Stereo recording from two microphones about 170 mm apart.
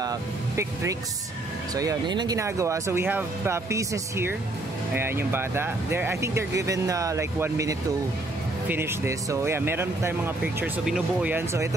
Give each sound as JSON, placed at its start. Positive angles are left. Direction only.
{"t": 0.0, "sound": "speech", "side_deg": -20}